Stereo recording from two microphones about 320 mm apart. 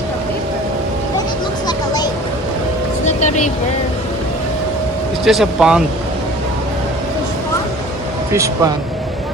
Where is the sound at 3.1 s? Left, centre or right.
Left.